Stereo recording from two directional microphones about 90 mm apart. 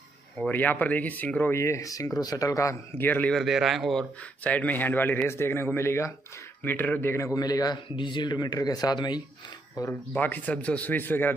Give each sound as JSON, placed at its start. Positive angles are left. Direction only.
{"t": 0.5, "sound": "a man's voice", "side_deg": 20}
{"t": 1.5, "sound": "speech", "side_deg": 35}
{"t": 2.9, "sound": "a man's voice", "side_deg": 20}
{"t": 3.3, "sound": "speech", "side_deg": 0}
{"t": 4.2, "sound": "a man's voice", "side_deg": 15}
{"t": 7.4, "sound": "speech", "side_deg": 50}
{"t": 7.9, "sound": "speech", "side_deg": 60}
{"t": 10.1, "sound": "a man's voice", "side_deg": 20}